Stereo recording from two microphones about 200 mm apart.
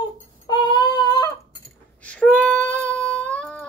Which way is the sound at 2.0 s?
5° left (ahead or behind).